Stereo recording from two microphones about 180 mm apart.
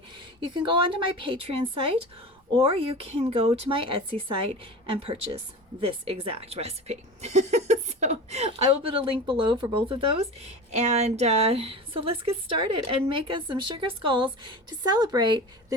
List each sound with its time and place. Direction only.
0.3 s a woman's voice: 25° right (ahead or behind)